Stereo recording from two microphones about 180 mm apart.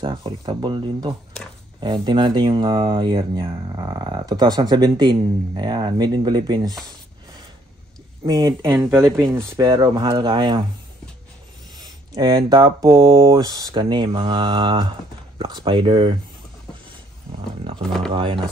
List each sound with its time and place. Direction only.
0.0 s speech: 25° right (ahead or behind)
8.3 s speech: 20° right (ahead or behind)
12.2 s speech: 25° right (ahead or behind)
18.1 s speech: 30° right (ahead or behind)